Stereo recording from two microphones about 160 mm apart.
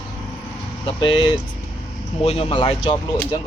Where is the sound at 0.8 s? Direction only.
35° left (ahead or behind).